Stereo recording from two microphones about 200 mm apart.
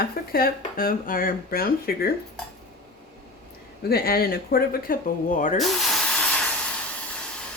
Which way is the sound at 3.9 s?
50° left (ahead or behind).